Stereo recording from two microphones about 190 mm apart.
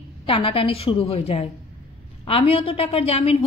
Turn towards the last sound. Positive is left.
turn(degrees=30)  # may be behind; listen again after turning